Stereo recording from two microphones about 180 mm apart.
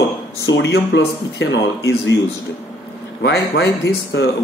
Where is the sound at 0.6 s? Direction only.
80° left.